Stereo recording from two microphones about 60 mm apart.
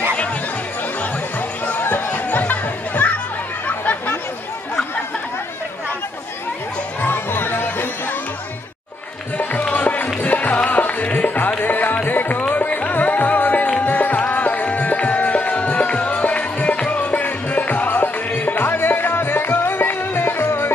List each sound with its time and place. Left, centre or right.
1.7 s music: left
3.6 s a sound: left
7.0 s music: left
9.4 s music: left